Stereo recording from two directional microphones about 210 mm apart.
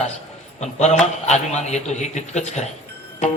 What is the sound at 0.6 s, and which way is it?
A man's voice, 35° left (ahead or behind).